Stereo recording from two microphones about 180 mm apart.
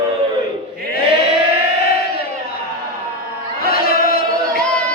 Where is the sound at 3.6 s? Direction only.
60° left (ahead or behind).